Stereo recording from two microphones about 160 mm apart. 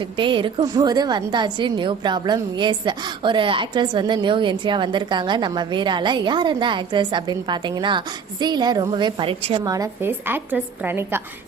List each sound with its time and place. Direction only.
0.2 s a woman's voice: 30° right (ahead or behind)
9.6 s a woman's voice: 20° right (ahead or behind)